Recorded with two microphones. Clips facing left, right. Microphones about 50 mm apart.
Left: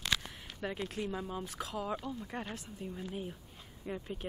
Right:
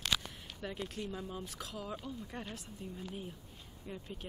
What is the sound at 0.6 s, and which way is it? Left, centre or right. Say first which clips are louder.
Speech: left 4 dB; left.